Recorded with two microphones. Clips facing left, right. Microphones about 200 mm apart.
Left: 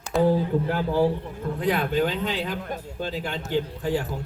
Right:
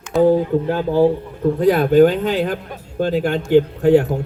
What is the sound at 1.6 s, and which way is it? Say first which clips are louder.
Speech: right 11 dB; 45° right (ahead or behind).